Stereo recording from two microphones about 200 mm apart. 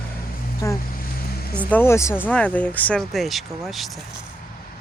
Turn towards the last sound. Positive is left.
turn(degrees=0)  # may be behind; listen again after turning